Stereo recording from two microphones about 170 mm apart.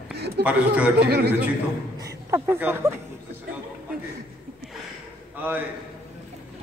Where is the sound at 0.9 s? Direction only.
70° right (ahead or behind).